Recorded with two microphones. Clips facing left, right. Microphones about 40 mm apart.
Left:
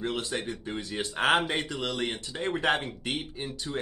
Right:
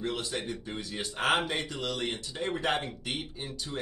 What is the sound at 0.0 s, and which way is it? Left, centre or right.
Speech, left.